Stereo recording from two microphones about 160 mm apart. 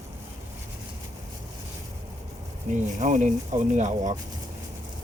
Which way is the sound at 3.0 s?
50° right (ahead or behind).